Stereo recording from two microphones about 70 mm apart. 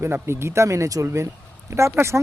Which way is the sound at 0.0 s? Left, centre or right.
Right.